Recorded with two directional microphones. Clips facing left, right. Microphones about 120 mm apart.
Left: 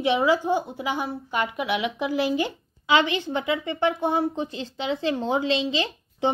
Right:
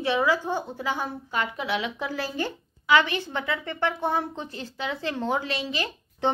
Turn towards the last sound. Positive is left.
turn(degrees=20)  # may be behind; listen again after turning